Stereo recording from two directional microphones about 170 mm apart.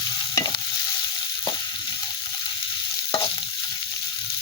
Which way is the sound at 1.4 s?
25° left (ahead or behind).